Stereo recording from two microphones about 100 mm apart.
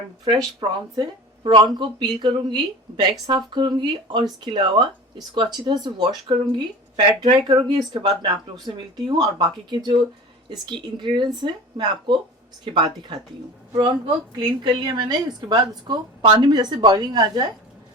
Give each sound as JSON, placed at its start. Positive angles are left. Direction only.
{"t": 0.6, "sound": "a woman's voice", "side_deg": -55}
{"t": 14.3, "sound": "a woman's voice", "side_deg": -45}